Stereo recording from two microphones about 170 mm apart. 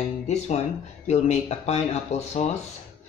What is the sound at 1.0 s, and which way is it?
Speech, 40° left (ahead or behind).